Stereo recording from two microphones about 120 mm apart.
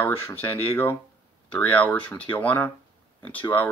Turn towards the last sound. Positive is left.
turn(degrees=15)  # may be behind; listen again after turning